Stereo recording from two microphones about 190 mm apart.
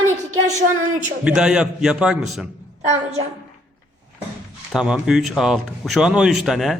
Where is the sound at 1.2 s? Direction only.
5° right (ahead or behind).